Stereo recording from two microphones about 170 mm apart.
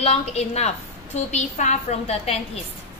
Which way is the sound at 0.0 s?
40° left (ahead or behind).